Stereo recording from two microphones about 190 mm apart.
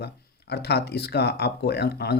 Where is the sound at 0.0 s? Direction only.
60° left (ahead or behind).